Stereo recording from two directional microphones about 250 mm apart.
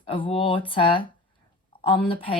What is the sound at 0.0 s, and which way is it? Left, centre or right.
Speech, left.